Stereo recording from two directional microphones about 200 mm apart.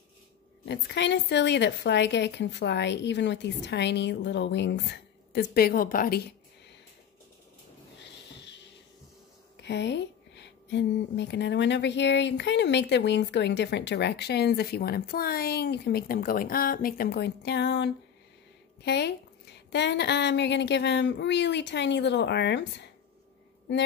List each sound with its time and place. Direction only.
0.7 s speech: 60° left (ahead or behind)
8.0 s a sound: 60° left (ahead or behind)
9.6 s speech: 60° left (ahead or behind)